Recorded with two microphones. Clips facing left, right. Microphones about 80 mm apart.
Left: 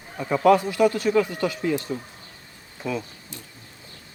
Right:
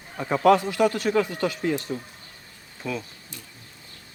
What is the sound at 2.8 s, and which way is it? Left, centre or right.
Speech, centre.